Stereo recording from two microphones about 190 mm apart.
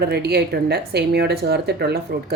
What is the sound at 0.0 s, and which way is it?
Speech, 55° right (ahead or behind).